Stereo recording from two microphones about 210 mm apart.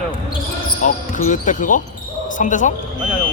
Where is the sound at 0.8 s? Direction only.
35° left (ahead or behind).